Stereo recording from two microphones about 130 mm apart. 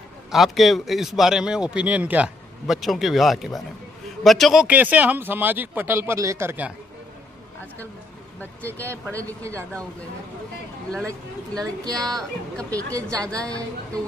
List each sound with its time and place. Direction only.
0.3 s speech: centre (ahead or behind)
4.6 s speech: 10° right (ahead or behind)
9.2 s speech: 25° right (ahead or behind)
11.6 s speech: 30° right (ahead or behind)
12.0 s speech: 5° left (ahead or behind)
12.9 s speech: 25° right (ahead or behind)